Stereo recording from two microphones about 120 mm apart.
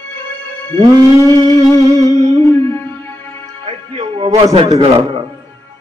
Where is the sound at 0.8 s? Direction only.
30° right (ahead or behind).